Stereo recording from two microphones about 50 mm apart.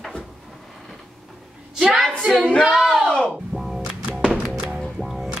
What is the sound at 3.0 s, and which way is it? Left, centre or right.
Music, left.